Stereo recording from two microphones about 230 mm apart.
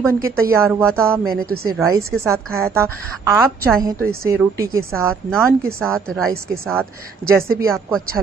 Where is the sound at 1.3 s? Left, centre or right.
Right.